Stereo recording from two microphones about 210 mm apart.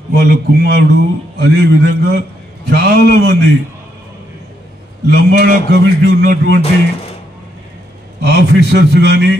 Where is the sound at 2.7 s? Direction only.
50° right (ahead or behind).